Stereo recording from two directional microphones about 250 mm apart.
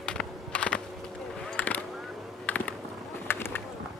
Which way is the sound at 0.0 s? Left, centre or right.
Centre.